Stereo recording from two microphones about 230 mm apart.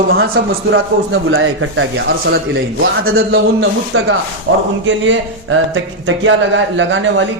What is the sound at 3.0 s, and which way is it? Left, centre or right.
Speech, right.